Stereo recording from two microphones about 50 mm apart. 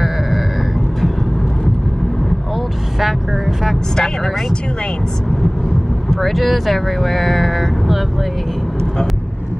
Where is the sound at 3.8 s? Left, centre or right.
Centre.